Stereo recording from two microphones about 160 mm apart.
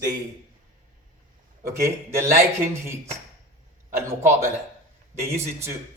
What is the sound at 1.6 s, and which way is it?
A man's voice, 15° right (ahead or behind).